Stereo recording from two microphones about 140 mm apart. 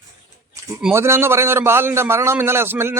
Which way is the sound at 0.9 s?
20° right (ahead or behind).